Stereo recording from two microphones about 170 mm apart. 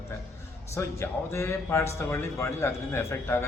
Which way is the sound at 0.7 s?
15° left (ahead or behind).